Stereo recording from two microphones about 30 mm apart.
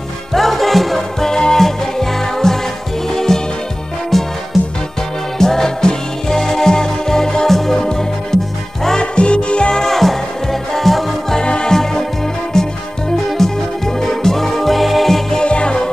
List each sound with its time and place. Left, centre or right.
0.3 s music: centre
1.2 s music: left; by 4.3 s centre
5.4 s music: centre
7.4 s music: centre
9.0 s music: left
9.8 s music: centre
11.3 s music: left
11.7 s music: centre
15.4 s music: left